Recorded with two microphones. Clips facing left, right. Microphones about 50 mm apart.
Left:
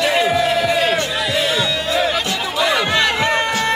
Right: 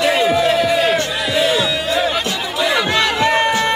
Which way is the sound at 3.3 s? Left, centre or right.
Centre.